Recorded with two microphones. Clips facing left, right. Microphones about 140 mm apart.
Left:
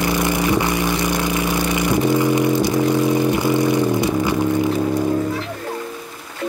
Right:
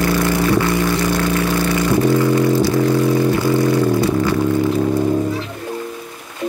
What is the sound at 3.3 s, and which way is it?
Vehicle, 20° left (ahead or behind).